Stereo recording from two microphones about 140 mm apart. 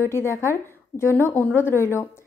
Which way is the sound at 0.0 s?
20° left (ahead or behind).